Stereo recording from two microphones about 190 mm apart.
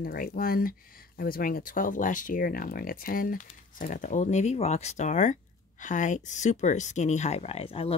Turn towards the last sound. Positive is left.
turn(degrees=30)  # may be behind; listen again after turning